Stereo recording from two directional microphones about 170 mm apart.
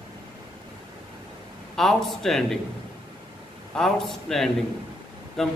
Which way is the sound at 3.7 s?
Centre (ahead or behind).